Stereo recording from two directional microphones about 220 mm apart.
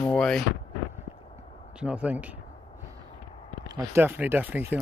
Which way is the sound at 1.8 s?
5° right (ahead or behind).